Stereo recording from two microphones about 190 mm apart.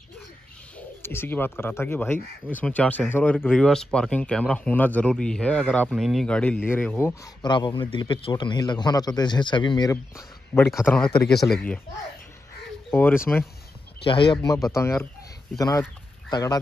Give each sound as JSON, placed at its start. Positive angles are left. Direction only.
{"t": 0.7, "sound": "speech", "side_deg": 10}
{"t": 7.4, "sound": "a man's voice", "side_deg": 25}
{"t": 10.7, "sound": "speech", "side_deg": 0}
{"t": 12.9, "sound": "speech", "side_deg": 10}
{"t": 14.0, "sound": "a man's voice", "side_deg": 25}